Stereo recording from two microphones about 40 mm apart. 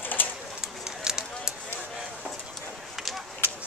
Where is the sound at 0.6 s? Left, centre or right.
Centre.